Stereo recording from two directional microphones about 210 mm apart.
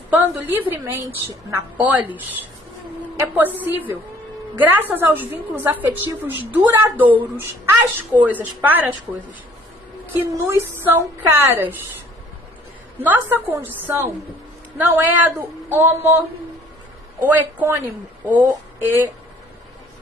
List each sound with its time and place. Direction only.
0.1 s a woman's voice: 10° right (ahead or behind)
10.2 s a woman's voice: 10° right (ahead or behind)
13.0 s a woman's voice: 10° right (ahead or behind)